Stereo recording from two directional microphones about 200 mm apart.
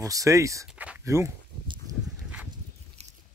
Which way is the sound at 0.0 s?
15° right (ahead or behind).